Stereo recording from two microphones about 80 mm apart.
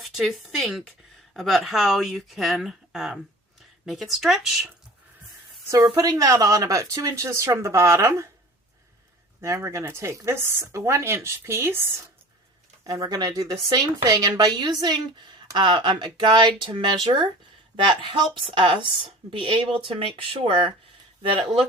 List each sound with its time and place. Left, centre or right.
0.0 s speech: centre
5.6 s a woman's voice: right
9.4 s speech: right
12.8 s speech: right
15.5 s speech: right
17.7 s speech: right